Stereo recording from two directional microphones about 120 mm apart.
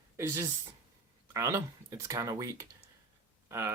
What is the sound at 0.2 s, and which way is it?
Speech, 25° right (ahead or behind).